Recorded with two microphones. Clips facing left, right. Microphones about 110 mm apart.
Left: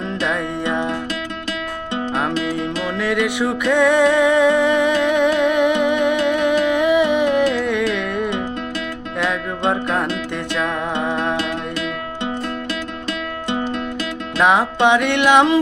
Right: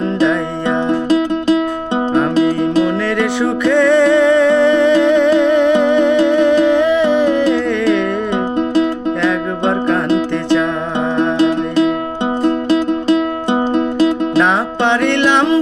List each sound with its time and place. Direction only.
0.3 s music: 15° left (ahead or behind)
3.2 s music: 10° left (ahead or behind)
9.2 s music: 10° left (ahead or behind)
11.3 s music: 25° right (ahead or behind)
14.4 s music: 10° left (ahead or behind)